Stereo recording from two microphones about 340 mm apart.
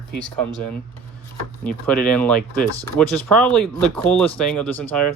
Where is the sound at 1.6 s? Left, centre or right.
Centre.